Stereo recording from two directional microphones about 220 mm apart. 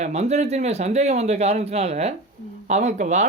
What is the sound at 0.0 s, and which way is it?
Speech, 30° right (ahead or behind).